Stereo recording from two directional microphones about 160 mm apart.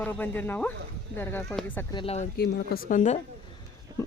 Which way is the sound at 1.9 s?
30° left (ahead or behind).